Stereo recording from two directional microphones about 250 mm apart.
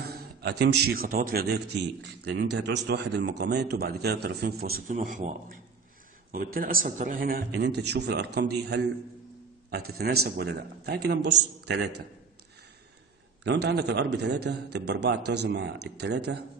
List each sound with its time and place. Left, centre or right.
0.1 s a man's voice: right
13.4 s a man's voice: right